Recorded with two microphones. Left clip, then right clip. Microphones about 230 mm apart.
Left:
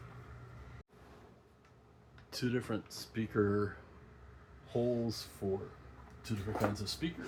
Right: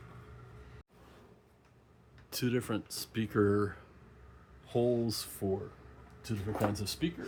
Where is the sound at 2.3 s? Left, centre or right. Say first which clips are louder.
Right 3 dB; right.